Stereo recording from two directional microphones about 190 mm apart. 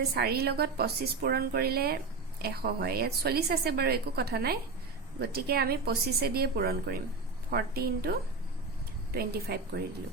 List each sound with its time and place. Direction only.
0.1 s a woman's voice: 55° right (ahead or behind)